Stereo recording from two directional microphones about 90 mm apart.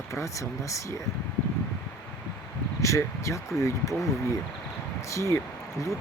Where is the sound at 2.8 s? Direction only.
35° left (ahead or behind).